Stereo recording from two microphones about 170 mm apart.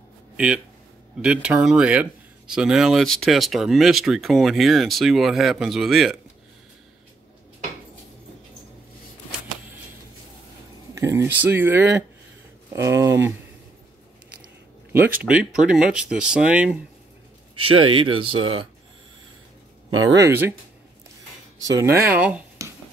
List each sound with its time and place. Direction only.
1.2 s speech: 5° right (ahead or behind)
11.0 s speech: 15° right (ahead or behind)
14.4 s biting: 10° right (ahead or behind)
15.2 s speech: 5° right (ahead or behind)
17.6 s speech: 30° right (ahead or behind)
20.2 s speech: 15° right (ahead or behind)
21.6 s speech: 15° right (ahead or behind)